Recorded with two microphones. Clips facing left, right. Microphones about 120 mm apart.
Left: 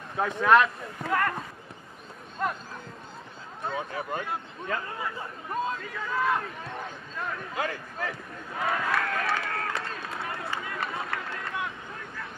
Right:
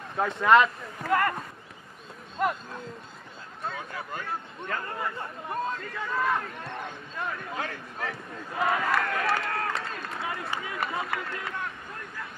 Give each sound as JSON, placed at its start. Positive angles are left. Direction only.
{"t": 0.1, "sound": "speech", "side_deg": 0}
{"t": 3.6, "sound": "speech", "side_deg": 20}
{"t": 4.6, "sound": "speech", "side_deg": 0}
{"t": 9.8, "sound": "run", "side_deg": 0}
{"t": 10.9, "sound": "speech", "side_deg": 0}